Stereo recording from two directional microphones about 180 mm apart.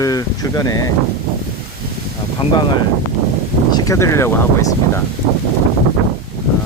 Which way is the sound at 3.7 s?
20° left (ahead or behind).